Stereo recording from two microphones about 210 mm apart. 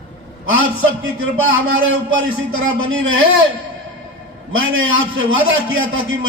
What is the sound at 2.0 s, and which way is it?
A man's voice, 70° right (ahead or behind).